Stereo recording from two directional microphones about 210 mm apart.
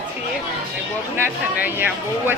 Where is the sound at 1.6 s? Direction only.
10° right (ahead or behind).